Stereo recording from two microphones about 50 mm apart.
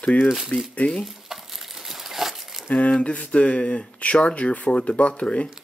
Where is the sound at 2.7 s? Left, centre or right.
Left.